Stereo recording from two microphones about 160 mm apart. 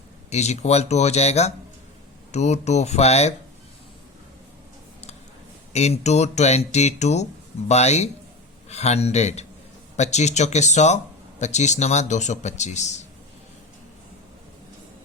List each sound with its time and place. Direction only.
0.3 s speech: 45° left (ahead or behind)
5.7 s speech: 45° left (ahead or behind)